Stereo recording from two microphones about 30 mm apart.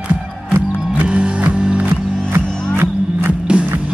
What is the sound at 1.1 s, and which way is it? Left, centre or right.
Music, right.